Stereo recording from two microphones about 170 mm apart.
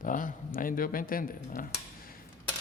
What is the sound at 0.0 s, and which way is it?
Speech, 50° left (ahead or behind).